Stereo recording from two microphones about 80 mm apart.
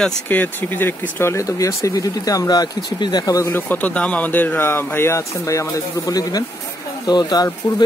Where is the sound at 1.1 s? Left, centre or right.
Left.